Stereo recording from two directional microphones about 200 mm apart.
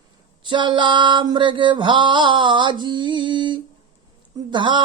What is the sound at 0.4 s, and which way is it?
Mantra, 25° right (ahead or behind).